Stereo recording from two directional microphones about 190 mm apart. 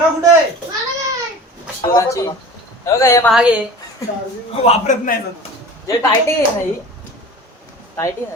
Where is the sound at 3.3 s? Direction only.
5° right (ahead or behind).